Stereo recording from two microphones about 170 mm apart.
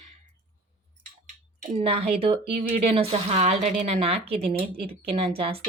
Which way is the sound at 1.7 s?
35° right (ahead or behind).